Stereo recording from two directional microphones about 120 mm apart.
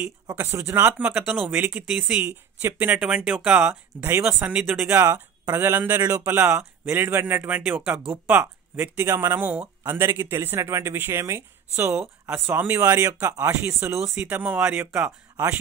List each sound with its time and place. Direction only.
0.4 s speech: 20° right (ahead or behind)
0.9 s speech: 5° right (ahead or behind); by 14.2 s 20° right (ahead or behind)
14.2 s speech: 10° right (ahead or behind)